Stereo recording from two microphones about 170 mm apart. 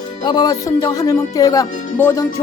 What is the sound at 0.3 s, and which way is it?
Speech, 25° left (ahead or behind).